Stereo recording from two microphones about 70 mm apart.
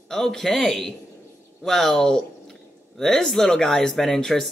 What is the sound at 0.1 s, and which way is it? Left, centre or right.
A man's voice, centre.